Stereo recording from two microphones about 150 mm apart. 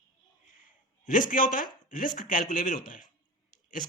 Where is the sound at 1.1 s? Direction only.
60° left (ahead or behind).